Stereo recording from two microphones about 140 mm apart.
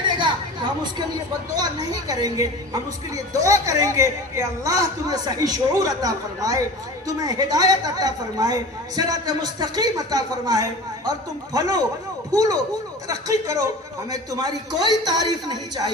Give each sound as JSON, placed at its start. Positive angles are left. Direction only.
{"t": 0.0, "sound": "chatter", "side_deg": -35}
{"t": 1.5, "sound": "a woman's voice", "side_deg": -25}